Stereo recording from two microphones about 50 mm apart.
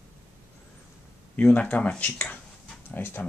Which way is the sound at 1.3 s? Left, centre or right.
Left.